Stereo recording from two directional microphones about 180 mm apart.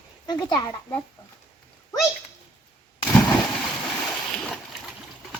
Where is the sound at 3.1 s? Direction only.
5° left (ahead or behind).